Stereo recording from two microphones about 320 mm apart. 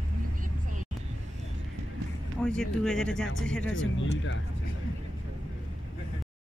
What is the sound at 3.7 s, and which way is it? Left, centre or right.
Speech, left.